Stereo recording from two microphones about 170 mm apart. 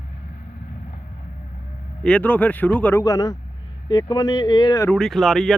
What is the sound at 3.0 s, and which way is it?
Speech, 20° left (ahead or behind).